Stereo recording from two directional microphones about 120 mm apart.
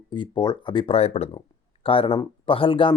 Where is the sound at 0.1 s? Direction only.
40° left (ahead or behind).